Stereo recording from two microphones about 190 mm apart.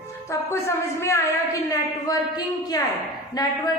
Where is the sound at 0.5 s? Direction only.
15° left (ahead or behind).